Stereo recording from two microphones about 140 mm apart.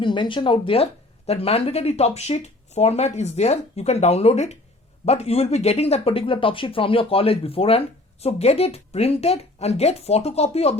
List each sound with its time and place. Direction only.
0.0 s speech: 35° left (ahead or behind)